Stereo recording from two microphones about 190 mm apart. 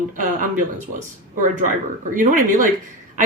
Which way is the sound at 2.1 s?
45° right (ahead or behind).